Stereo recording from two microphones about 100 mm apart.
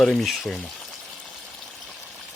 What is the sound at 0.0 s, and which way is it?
Speech, 5° left (ahead or behind).